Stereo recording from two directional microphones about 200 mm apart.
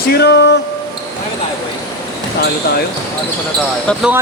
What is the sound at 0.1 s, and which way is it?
Music, 55° left (ahead or behind).